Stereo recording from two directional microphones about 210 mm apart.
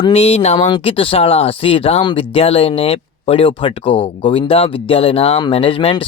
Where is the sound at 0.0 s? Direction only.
30° left (ahead or behind).